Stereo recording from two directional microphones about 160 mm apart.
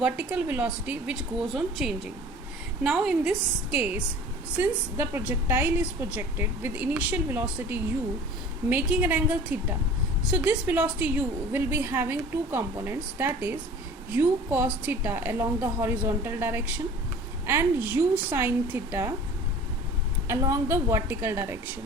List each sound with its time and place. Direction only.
0.0 s a woman's voice: 10° right (ahead or behind)
20.2 s a woman's voice: 20° right (ahead or behind)